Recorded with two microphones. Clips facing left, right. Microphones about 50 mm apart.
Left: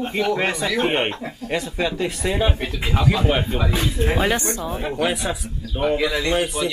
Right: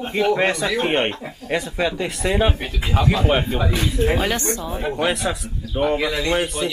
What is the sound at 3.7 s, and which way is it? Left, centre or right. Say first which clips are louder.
Speech: right 1 dB; left.